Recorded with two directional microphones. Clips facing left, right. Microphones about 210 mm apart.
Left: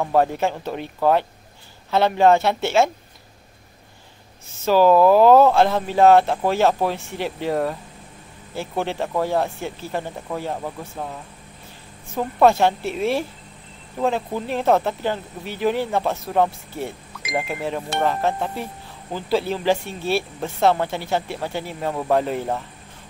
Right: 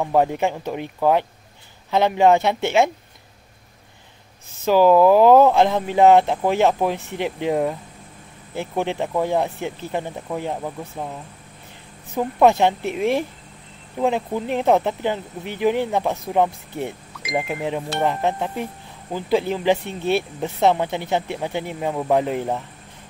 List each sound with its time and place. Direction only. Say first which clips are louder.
0.0 s speech: even; 15° right (ahead or behind)
4.6 s speech: right 1 dB; 15° right (ahead or behind)
12.2 s speech: even; 15° right (ahead or behind)